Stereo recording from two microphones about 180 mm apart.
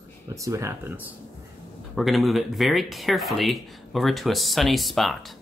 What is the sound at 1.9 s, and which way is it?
Speech, centre (ahead or behind).